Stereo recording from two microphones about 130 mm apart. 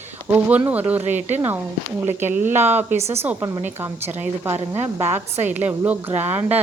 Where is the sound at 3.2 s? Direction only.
15° right (ahead or behind).